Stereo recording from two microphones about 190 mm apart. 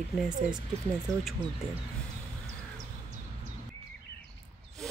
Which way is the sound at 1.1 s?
15° right (ahead or behind).